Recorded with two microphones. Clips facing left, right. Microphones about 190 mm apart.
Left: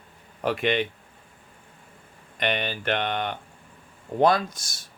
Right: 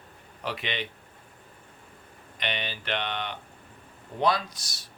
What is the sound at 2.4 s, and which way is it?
A man's voice, 50° left (ahead or behind).